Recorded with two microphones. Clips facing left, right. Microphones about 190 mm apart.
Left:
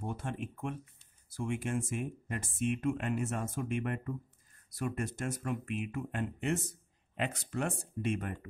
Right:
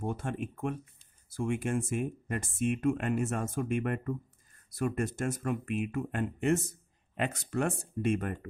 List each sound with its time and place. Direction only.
0.0 s speech: 45° right (ahead or behind)